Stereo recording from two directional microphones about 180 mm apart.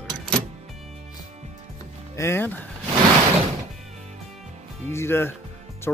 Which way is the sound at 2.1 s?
15° left (ahead or behind).